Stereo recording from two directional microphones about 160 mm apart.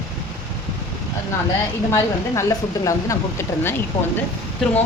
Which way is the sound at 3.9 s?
35° left (ahead or behind).